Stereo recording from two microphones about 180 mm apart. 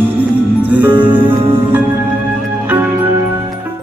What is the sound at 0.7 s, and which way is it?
Music, 10° right (ahead or behind).